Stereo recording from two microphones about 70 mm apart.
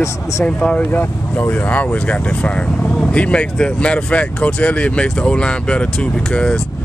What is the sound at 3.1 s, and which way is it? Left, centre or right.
Speech, centre.